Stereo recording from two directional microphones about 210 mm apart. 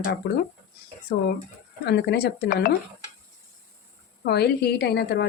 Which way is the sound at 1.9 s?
50° left (ahead or behind).